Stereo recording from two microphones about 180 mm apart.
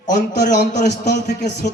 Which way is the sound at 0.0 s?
45° left (ahead or behind).